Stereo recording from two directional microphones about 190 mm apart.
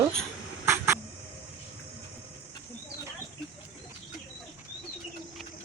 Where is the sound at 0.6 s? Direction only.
15° right (ahead or behind).